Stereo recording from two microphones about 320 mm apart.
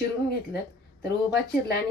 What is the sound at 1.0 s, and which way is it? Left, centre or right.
Speech, left.